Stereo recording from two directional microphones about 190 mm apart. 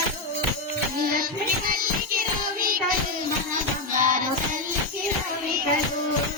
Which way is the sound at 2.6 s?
50° right (ahead or behind).